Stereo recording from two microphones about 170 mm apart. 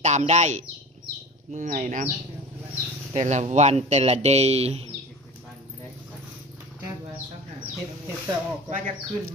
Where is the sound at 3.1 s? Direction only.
40° right (ahead or behind).